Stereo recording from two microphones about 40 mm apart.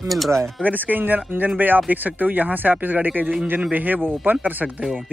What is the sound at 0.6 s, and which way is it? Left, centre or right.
Speech, right.